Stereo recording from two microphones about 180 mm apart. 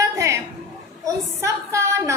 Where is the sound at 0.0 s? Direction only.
15° right (ahead or behind).